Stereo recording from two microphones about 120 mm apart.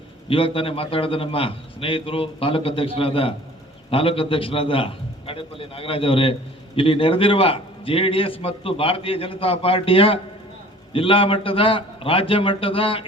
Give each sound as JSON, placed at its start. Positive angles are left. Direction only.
{"t": 0.3, "sound": "a man's voice", "side_deg": 50}